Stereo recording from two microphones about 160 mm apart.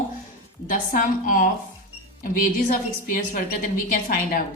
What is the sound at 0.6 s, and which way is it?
A woman's voice, 60° left (ahead or behind).